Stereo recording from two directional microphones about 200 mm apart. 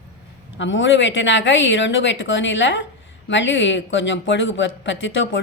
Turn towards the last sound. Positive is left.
turn(degrees=70)  # may be behind; listen again after turning